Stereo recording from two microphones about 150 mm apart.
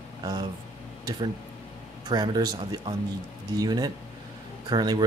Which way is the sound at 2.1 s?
25° right (ahead or behind).